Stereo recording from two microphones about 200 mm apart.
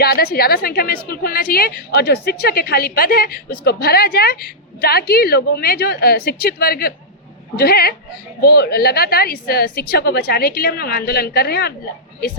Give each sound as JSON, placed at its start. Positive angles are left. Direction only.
{"t": 0.0, "sound": "a woman's voice", "side_deg": 50}